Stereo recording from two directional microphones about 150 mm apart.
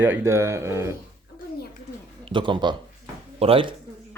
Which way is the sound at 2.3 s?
35° right (ahead or behind).